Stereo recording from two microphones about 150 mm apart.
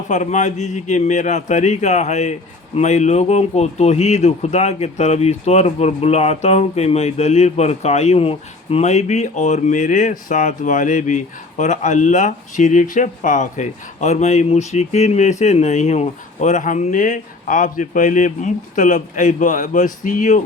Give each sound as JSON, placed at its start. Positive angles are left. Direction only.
{"t": 0.1, "sound": "speech", "side_deg": 50}